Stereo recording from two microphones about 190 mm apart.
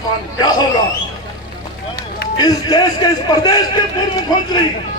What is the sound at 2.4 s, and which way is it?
A man's voice, 20° left (ahead or behind).